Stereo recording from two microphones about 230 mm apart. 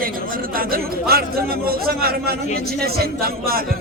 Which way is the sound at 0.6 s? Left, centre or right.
Right.